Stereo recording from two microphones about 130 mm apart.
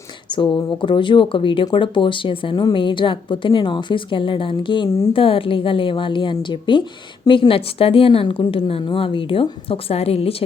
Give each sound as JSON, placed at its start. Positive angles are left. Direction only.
{"t": 0.3, "sound": "a woman's voice", "side_deg": 35}